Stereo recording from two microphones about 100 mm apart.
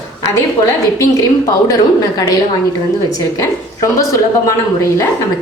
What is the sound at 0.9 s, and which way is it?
A woman's voice, 35° left (ahead or behind).